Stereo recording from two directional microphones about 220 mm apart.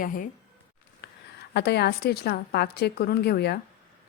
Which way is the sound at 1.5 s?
50° left (ahead or behind).